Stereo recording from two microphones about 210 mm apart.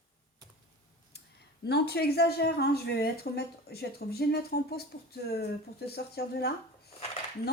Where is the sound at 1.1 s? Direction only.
50° left (ahead or behind).